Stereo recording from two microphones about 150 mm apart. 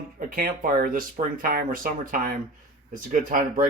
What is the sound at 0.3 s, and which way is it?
Speech, 70° right (ahead or behind).